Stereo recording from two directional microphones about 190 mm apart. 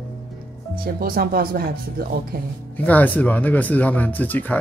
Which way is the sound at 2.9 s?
10° left (ahead or behind).